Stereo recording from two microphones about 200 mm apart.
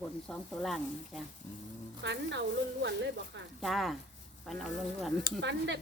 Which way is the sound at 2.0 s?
60° right (ahead or behind).